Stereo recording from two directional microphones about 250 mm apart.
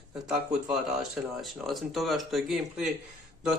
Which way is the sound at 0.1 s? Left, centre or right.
Centre.